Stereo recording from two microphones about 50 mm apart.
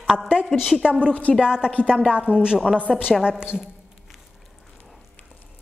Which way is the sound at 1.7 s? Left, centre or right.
Left.